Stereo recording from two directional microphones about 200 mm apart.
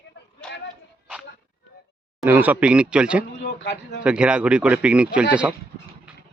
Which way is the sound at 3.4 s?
60° left (ahead or behind).